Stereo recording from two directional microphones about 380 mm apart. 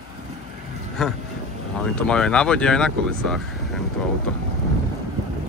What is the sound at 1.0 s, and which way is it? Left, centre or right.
Speech, centre.